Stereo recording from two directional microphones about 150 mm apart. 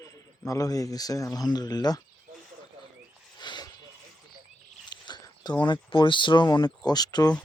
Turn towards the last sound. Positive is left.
turn(degrees=25)  # may be behind; listen again after turning